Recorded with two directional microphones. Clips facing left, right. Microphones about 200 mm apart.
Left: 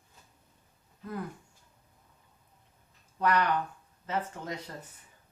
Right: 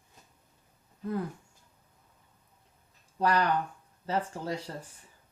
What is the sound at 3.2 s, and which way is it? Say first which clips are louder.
Speech: right 1 dB; 35° right (ahead or behind).